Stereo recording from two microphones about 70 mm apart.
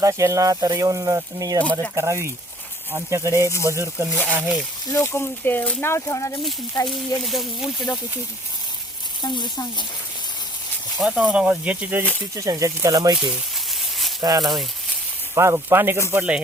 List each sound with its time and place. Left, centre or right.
0.0 s speech: right
2.0 s speech: right
4.3 s speech: right
4.9 s speech: left
7.3 s speech: centre
9.2 s speech: left
10.9 s speech: centre
11.4 s speech: right
12.4 s speech: right
13.1 s speech: centre
14.2 s speech: right
15.4 s speech: right
16.1 s speech: centre